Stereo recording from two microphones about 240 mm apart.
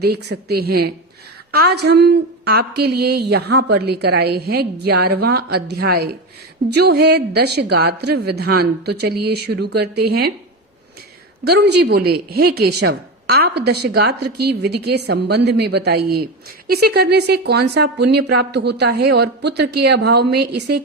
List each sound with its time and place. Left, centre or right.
0.0 s a woman's voice: right
11.4 s speech: right